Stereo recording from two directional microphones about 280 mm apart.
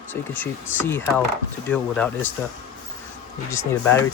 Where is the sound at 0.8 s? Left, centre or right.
Centre.